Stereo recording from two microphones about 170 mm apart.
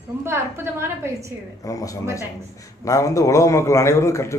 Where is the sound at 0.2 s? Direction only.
15° right (ahead or behind).